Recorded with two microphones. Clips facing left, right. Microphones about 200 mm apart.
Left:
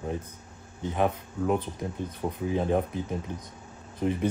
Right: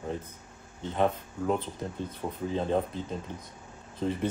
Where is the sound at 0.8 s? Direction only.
15° left (ahead or behind).